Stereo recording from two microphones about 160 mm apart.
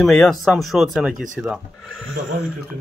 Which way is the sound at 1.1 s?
55° right (ahead or behind).